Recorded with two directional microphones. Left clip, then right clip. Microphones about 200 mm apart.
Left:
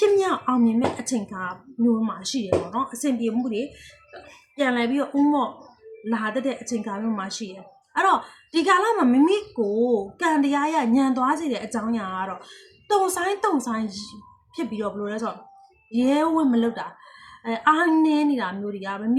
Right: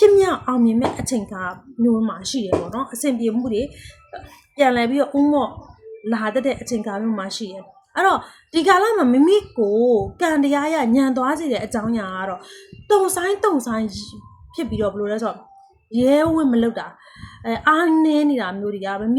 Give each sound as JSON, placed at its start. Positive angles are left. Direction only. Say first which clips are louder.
{"t": 0.0, "sound": "a woman's voice", "louder": "right 6 dB", "side_deg": -10}